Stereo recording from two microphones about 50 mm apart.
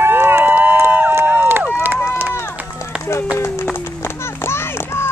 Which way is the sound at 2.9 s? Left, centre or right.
Right.